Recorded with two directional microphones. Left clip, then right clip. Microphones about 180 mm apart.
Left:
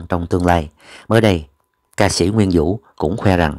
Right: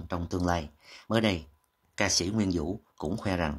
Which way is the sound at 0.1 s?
40° left (ahead or behind).